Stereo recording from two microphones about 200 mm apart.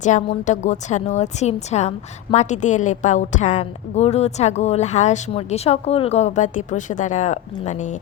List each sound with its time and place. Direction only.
0.0 s a woman's voice: 35° left (ahead or behind)